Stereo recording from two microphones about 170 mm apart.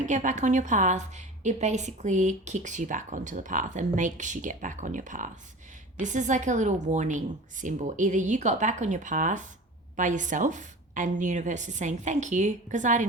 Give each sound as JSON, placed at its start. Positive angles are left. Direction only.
{"t": 0.0, "sound": "a woman's voice", "side_deg": -45}